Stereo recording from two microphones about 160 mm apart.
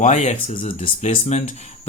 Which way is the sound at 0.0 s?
50° left (ahead or behind).